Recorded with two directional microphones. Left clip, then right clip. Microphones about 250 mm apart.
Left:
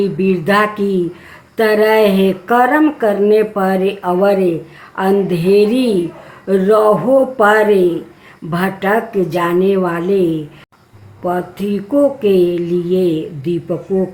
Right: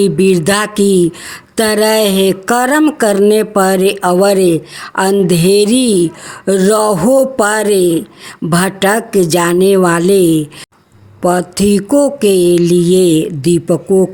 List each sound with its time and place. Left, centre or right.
0.0 s speech: right